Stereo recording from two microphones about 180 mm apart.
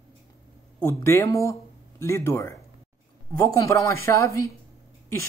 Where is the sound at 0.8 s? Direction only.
15° left (ahead or behind).